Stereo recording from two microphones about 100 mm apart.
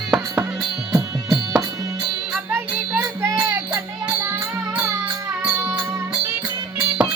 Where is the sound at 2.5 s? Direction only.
25° right (ahead or behind).